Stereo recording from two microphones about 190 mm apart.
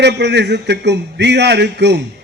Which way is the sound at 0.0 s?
65° right (ahead or behind).